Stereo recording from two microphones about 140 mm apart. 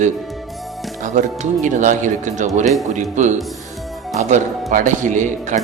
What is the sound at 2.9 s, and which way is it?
Speech, 60° right (ahead or behind).